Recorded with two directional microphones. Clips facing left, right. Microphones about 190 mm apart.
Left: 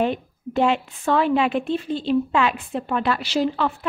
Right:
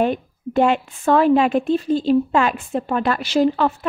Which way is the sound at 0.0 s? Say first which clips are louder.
Right 3 dB; 50° right (ahead or behind).